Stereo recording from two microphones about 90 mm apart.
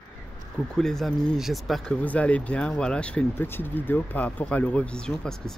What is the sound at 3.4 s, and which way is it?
Speech, 20° left (ahead or behind).